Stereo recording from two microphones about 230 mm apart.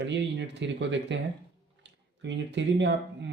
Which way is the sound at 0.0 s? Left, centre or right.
Right.